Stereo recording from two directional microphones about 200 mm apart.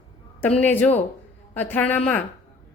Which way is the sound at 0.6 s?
10° left (ahead or behind).